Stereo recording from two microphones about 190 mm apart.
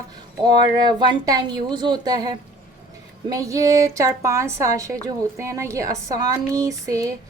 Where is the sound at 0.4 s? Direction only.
20° right (ahead or behind).